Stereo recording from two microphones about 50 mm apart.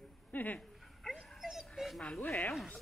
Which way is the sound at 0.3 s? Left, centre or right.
Left.